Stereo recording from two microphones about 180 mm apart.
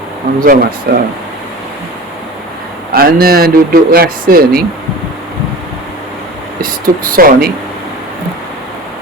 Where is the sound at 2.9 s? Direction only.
55° right (ahead or behind).